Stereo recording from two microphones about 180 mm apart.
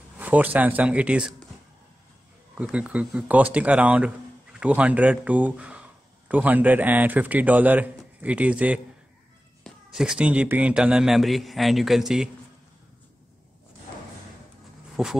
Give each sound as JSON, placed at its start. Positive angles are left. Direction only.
{"t": 0.2, "sound": "speech", "side_deg": -10}
{"t": 2.5, "sound": "speech", "side_deg": -5}
{"t": 15.0, "sound": "speech", "side_deg": -5}